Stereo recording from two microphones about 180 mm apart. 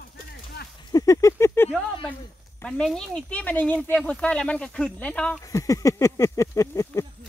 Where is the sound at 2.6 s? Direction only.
5° left (ahead or behind).